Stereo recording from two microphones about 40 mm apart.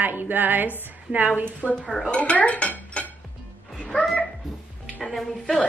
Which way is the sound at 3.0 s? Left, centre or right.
Left.